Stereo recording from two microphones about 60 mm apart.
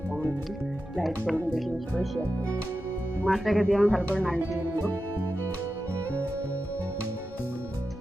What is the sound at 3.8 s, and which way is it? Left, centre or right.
Speech, left.